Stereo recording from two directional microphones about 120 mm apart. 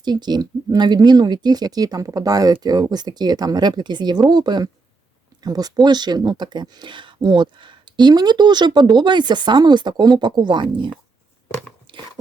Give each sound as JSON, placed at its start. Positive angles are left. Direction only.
{"t": 0.0, "sound": "speech", "side_deg": -35}
{"t": 11.9, "sound": "biting", "side_deg": -45}